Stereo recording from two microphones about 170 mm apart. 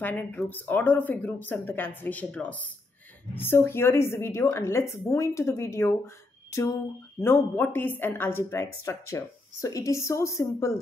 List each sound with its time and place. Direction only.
0.0 s a woman's voice: 10° left (ahead or behind)